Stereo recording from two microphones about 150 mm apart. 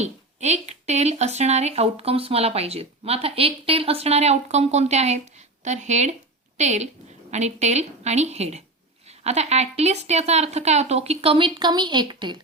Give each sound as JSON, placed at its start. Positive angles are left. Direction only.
{"t": 0.0, "sound": "speech", "side_deg": -45}